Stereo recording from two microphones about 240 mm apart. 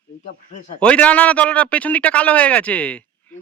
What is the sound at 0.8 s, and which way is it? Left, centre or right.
A man's voice, centre.